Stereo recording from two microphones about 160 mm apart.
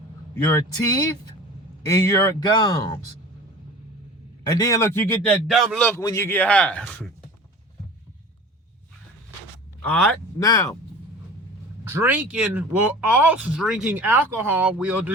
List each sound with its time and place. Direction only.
0.5 s speech: 25° left (ahead or behind)
4.5 s a man's voice: 20° left (ahead or behind); by 5.9 s centre (ahead or behind)
5.9 s a man's voice: 20° left (ahead or behind)
9.8 s a man's voice: 5° left (ahead or behind)
10.3 s speech: 20° left (ahead or behind)
11.9 s speech: 10° right (ahead or behind)